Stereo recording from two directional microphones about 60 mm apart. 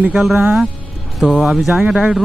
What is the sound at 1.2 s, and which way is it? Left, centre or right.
Speech, centre.